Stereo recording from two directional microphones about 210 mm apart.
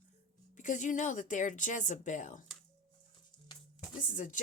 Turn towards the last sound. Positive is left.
turn(degrees=40)  # may be behind; listen again after turning